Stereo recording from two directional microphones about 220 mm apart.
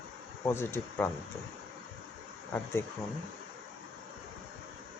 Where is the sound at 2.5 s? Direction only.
10° left (ahead or behind).